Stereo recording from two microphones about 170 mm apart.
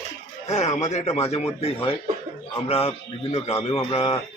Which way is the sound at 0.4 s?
40° left (ahead or behind).